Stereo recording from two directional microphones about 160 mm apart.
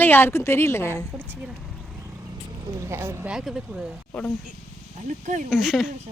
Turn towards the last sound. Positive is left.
turn(degrees=0)  # may be behind; listen again after turning